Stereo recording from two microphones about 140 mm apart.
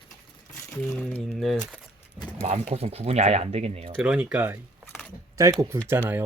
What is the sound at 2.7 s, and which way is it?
Speech, 45° right (ahead or behind).